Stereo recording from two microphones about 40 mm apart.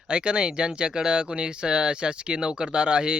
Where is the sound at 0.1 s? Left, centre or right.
Right.